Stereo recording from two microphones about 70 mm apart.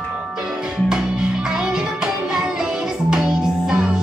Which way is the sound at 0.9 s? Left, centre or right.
Centre.